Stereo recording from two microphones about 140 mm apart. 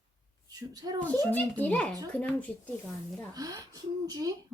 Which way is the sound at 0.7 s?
25° right (ahead or behind).